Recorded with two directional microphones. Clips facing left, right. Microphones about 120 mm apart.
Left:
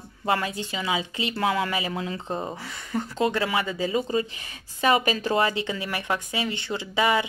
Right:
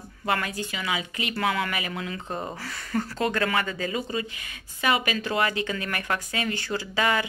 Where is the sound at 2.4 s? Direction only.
15° left (ahead or behind).